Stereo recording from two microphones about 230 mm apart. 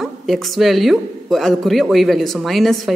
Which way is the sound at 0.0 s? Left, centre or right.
Centre.